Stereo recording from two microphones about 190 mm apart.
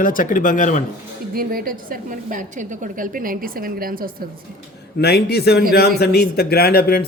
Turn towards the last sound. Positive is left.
turn(degrees=55)  # may be behind; listen again after turning